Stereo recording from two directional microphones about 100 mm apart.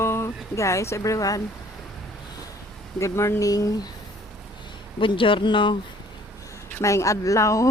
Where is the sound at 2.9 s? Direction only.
30° left (ahead or behind).